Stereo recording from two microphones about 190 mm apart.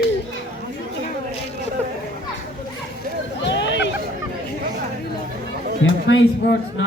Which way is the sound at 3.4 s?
70° left (ahead or behind).